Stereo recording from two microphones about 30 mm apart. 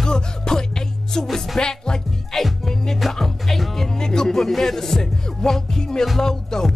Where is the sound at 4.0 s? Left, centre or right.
Left.